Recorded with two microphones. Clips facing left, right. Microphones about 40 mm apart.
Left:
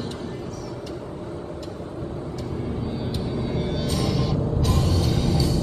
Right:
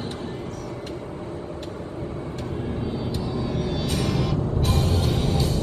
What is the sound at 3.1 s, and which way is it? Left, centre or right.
Vehicle, left.